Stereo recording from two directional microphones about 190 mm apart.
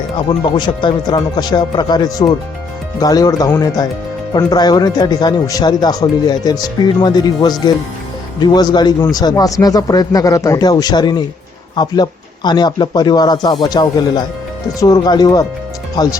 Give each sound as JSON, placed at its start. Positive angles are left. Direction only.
{"t": 0.2, "sound": "speech", "side_deg": 25}